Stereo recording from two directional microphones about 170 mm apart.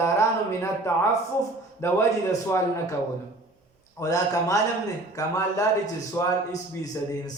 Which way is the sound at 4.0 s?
20° left (ahead or behind).